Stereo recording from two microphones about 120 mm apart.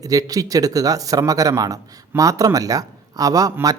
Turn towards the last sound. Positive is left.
turn(degrees=-30)  # may be behind; listen again after turning